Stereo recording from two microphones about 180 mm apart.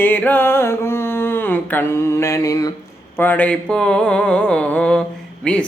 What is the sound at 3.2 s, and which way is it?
Mantra, 10° left (ahead or behind).